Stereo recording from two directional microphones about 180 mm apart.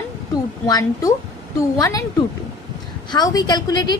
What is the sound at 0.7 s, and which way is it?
A woman's voice, 20° left (ahead or behind).